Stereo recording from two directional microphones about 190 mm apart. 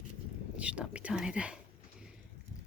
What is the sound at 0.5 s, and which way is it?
Speech, 5° right (ahead or behind).